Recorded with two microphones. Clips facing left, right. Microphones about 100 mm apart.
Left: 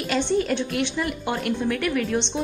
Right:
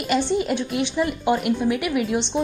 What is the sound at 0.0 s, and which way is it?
A woman's voice, 10° right (ahead or behind).